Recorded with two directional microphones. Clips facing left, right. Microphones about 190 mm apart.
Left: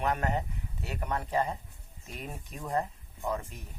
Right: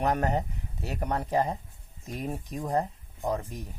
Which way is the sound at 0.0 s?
40° right (ahead or behind).